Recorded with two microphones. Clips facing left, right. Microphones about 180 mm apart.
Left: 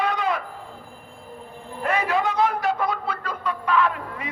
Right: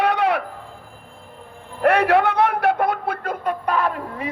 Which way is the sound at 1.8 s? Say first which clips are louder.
Right 7 dB; 65° right (ahead or behind).